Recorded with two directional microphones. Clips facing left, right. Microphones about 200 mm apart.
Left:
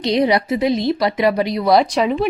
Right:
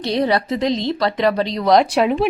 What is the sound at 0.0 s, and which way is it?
A woman's voice, 15° left (ahead or behind).